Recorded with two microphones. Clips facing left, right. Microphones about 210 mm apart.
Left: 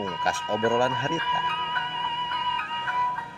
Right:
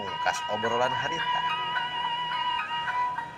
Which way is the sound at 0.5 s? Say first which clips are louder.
Left 5 dB; 55° left (ahead or behind).